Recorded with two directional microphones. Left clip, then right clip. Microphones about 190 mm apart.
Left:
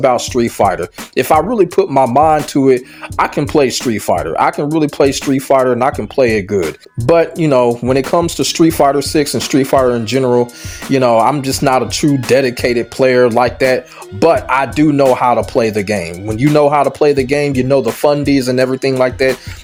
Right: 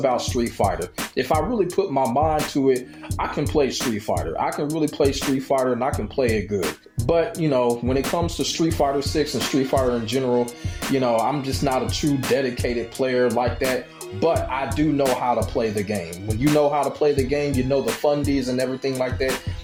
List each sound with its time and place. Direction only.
0.0 s speech: 45° left (ahead or behind)